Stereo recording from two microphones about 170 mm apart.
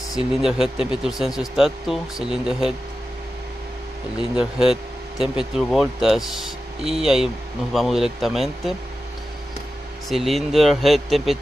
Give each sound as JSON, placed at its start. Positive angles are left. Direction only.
{"t": 0.1, "sound": "speech", "side_deg": -5}
{"t": 4.2, "sound": "speech", "side_deg": -5}
{"t": 10.0, "sound": "speech", "side_deg": 0}